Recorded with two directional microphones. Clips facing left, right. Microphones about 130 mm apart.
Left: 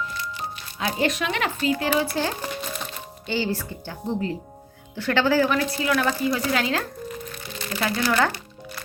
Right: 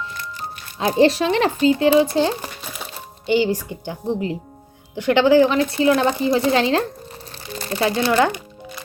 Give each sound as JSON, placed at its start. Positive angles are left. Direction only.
{"t": 0.9, "sound": "a woman's voice", "side_deg": -30}